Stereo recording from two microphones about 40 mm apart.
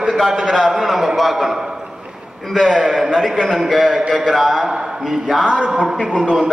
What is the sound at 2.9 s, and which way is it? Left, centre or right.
A man's voice, centre.